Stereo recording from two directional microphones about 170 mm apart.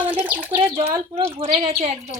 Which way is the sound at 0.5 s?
35° right (ahead or behind).